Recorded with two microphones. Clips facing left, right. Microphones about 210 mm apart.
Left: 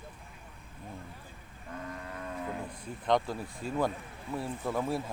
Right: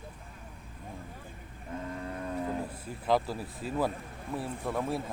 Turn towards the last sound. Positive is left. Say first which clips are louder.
# even
turn(degrees=0)  # may be behind; listen again after turning